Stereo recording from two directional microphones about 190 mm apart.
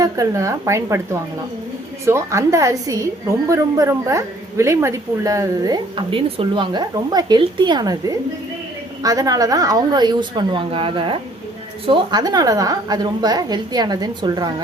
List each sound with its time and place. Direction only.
0.0 s speech: 15° right (ahead or behind)
2.0 s a woman's voice: 15° right (ahead or behind)